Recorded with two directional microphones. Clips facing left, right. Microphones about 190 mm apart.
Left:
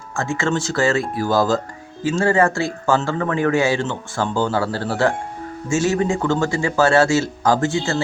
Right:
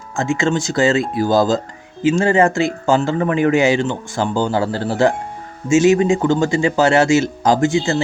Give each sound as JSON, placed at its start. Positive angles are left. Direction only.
{"t": 0.2, "sound": "speech", "side_deg": -20}